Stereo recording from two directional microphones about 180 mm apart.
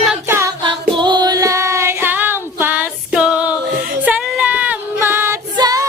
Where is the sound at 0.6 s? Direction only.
25° right (ahead or behind); by 3.2 s 10° right (ahead or behind).